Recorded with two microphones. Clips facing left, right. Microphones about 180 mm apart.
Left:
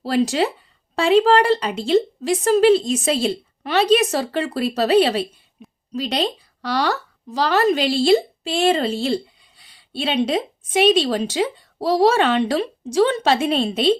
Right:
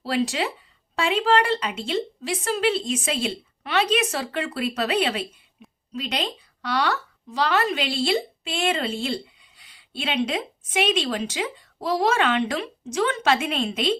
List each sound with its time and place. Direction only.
0.0 s a woman's voice: 40° left (ahead or behind)